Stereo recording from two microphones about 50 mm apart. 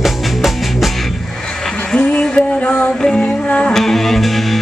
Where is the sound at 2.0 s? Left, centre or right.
Left.